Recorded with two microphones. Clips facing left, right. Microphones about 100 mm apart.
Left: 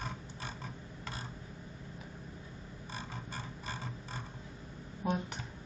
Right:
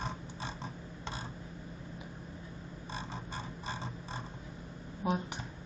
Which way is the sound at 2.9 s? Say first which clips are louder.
Right 2 dB; 25° right (ahead or behind).